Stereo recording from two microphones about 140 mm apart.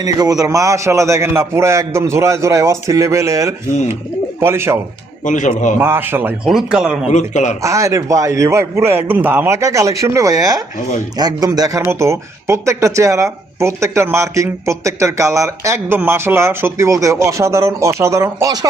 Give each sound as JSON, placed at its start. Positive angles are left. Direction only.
{"t": 0.0, "sound": "speech", "side_deg": -25}
{"t": 5.2, "sound": "a man's voice", "side_deg": 65}
{"t": 5.8, "sound": "a man's voice", "side_deg": -15}
{"t": 6.4, "sound": "speech", "side_deg": -5}
{"t": 7.1, "sound": "a man's voice", "side_deg": 60}
{"t": 7.6, "sound": "speech", "side_deg": -20}